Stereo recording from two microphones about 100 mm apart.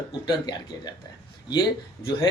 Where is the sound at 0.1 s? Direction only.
45° left (ahead or behind).